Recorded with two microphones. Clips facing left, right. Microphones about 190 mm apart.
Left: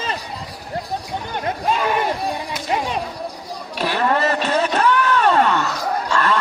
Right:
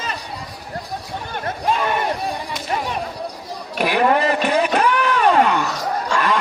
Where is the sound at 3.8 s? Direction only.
15° right (ahead or behind).